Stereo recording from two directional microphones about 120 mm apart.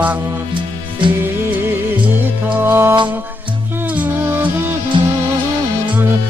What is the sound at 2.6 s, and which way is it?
Music, 20° right (ahead or behind).